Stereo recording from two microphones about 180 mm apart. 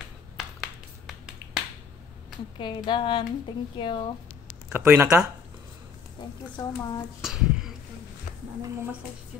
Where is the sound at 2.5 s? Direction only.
25° left (ahead or behind).